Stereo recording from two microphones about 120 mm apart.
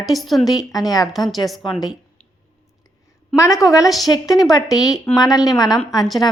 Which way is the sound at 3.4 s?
25° left (ahead or behind).